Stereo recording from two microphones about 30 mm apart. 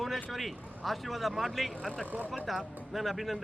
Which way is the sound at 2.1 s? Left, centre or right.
Right.